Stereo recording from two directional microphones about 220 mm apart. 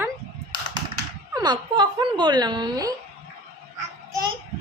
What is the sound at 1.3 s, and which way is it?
Speech, 20° right (ahead or behind).